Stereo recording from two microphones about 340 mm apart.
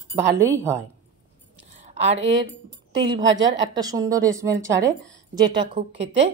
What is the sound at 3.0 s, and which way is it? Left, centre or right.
A woman's voice, centre.